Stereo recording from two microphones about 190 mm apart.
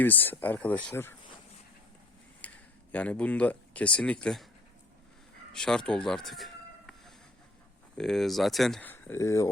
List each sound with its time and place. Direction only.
0.0 s speech: 10° left (ahead or behind)
2.4 s a sound: 10° left (ahead or behind)
2.9 s speech: 10° left (ahead or behind)
5.5 s speech: 5° left (ahead or behind)